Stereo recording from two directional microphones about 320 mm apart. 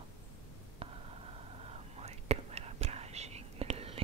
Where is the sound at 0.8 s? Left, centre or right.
Centre.